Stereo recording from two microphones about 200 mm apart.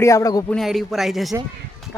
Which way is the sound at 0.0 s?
15° left (ahead or behind).